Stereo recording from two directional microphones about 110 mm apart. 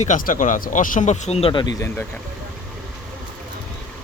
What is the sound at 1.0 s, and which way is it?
Speech, 90° left.